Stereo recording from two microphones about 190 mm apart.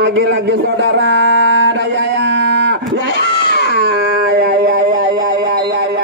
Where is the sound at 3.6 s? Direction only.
60° right (ahead or behind).